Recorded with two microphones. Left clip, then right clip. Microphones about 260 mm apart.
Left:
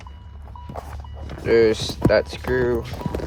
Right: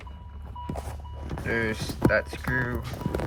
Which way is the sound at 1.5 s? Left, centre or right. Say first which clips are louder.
Left 12 dB; centre.